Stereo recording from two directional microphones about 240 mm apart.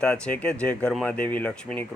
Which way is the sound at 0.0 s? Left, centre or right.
Centre.